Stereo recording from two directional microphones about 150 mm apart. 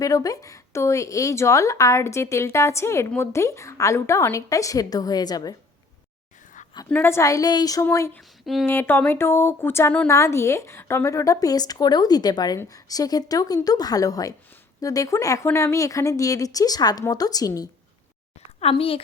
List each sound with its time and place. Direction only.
0.0 s a woman's voice: 25° left (ahead or behind)
6.9 s a woman's voice: 15° left (ahead or behind)
18.6 s a woman's voice: 40° left (ahead or behind)